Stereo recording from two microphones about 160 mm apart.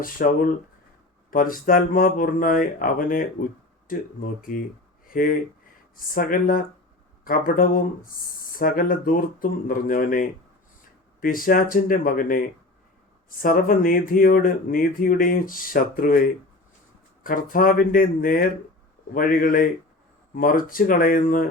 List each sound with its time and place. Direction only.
0.0 s speech: 60° left (ahead or behind)
5.1 s speech: 60° left (ahead or behind)
13.4 s speech: 60° left (ahead or behind)